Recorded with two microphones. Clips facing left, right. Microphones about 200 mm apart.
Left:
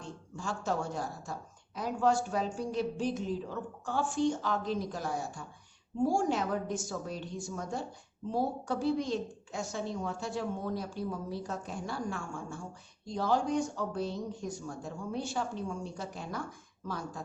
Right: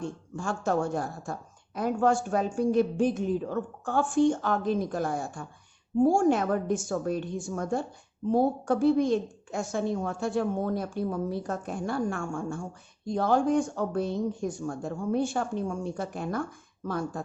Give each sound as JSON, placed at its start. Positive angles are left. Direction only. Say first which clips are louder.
{"t": 0.0, "sound": "a woman's voice", "louder": "right 7 dB", "side_deg": -50}